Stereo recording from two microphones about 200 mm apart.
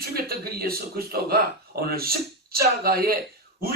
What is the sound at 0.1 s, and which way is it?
Speech, 50° right (ahead or behind).